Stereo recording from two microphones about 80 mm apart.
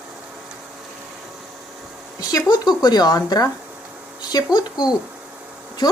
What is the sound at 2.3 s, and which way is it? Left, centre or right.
Speech, left.